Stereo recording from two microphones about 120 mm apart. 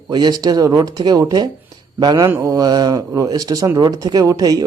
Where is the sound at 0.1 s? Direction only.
35° right (ahead or behind).